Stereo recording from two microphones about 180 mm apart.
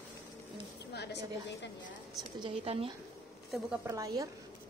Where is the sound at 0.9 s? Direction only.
70° left (ahead or behind).